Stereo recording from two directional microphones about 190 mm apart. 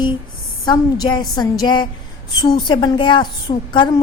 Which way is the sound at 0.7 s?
20° left (ahead or behind).